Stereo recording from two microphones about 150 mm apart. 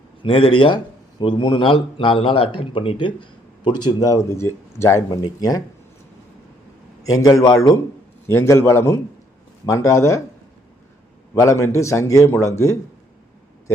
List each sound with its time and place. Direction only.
0.2 s a man's voice: 35° left (ahead or behind)
7.0 s a man's voice: 25° left (ahead or behind)
11.3 s a man's voice: 20° left (ahead or behind)